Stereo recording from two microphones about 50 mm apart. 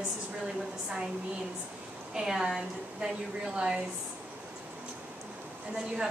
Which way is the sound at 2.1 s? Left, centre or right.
Centre.